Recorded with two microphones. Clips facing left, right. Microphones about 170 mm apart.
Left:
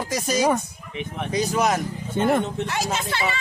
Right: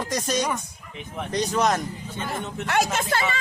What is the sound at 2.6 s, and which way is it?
Speech, 60° right (ahead or behind).